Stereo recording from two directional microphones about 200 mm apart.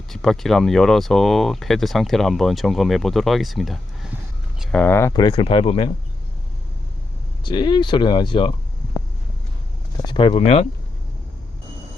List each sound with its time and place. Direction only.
0.1 s speech: centre (ahead or behind); by 5.9 s 25° left (ahead or behind)
7.4 s speech: 20° left (ahead or behind)
10.1 s speech: 25° left (ahead or behind)